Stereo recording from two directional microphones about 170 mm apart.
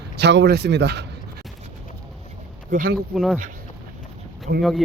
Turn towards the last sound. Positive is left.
turn(degrees=0)  # may be behind; listen again after turning